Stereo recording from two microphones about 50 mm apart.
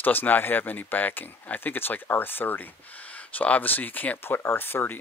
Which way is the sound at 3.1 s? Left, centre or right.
Left.